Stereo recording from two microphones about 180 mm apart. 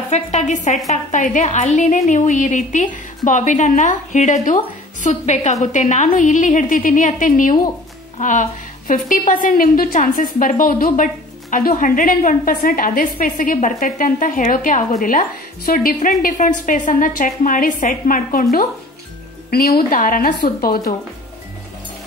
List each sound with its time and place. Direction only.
0.1 s a woman's voice: 40° left (ahead or behind); by 20.8 s 55° left (ahead or behind)